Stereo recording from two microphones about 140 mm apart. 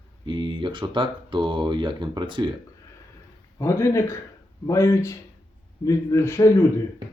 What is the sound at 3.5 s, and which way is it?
A man's voice, 20° left (ahead or behind).